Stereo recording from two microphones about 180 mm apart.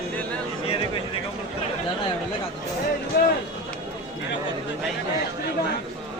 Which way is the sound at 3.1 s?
55° left (ahead or behind).